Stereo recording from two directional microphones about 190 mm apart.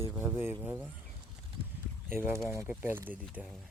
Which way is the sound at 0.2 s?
10° right (ahead or behind).